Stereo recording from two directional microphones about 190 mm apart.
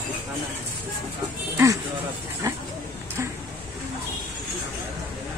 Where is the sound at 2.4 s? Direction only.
15° right (ahead or behind).